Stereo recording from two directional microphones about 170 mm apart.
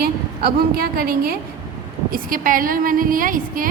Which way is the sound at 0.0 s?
60° right (ahead or behind).